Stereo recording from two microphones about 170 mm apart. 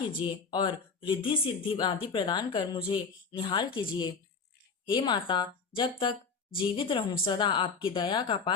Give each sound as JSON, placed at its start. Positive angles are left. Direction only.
{"t": 0.1, "sound": "a woman's voice", "side_deg": 30}